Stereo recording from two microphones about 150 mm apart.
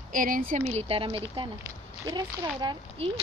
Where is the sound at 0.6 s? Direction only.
40° right (ahead or behind).